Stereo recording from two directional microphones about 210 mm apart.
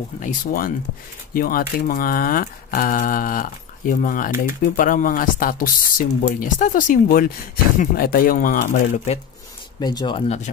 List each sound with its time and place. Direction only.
0.2 s speech: 40° left (ahead or behind)
9.8 s speech: 20° left (ahead or behind)